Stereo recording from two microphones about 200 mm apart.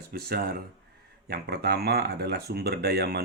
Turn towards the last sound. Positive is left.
turn(degrees=-55)  # may be behind; listen again after turning